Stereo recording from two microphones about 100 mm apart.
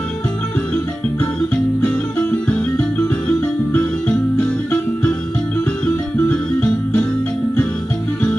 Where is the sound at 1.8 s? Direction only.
15° left (ahead or behind).